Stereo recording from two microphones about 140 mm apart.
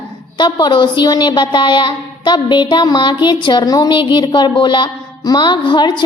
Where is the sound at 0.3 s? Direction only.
35° left (ahead or behind).